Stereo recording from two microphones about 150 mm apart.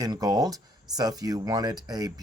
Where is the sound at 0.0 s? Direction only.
25° right (ahead or behind).